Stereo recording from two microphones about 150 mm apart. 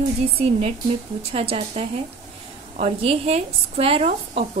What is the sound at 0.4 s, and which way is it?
Speech, 45° right (ahead or behind).